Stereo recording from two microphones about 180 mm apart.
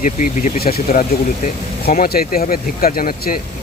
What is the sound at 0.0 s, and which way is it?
Speech, 45° left (ahead or behind).